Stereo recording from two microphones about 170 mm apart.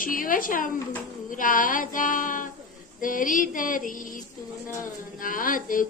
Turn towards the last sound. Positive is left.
turn(degrees=55)  # may be behind; listen again after turning